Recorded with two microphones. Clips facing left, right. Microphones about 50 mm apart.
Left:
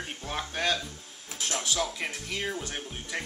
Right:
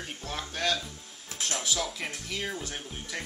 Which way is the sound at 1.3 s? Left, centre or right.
Centre.